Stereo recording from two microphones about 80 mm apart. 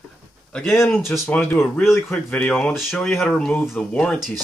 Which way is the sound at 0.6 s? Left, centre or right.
Centre.